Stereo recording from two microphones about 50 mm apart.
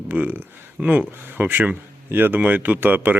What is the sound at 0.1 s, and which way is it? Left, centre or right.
Speech, right.